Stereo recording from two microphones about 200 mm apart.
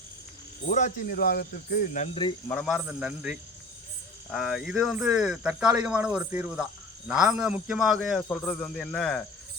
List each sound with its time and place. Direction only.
0.7 s speech: 35° left (ahead or behind)
2.5 s speech: centre (ahead or behind)